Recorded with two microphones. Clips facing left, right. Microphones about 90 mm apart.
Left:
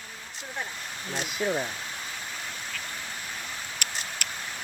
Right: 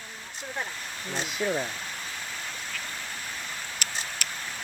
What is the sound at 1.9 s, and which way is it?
Waterfall, 15° left (ahead or behind).